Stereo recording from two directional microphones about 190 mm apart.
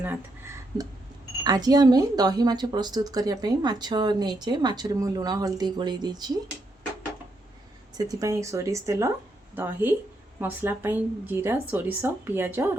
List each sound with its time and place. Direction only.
0.0 s speech: 10° right (ahead or behind)
7.9 s speech: 20° right (ahead or behind)
10.4 s speech: 10° right (ahead or behind)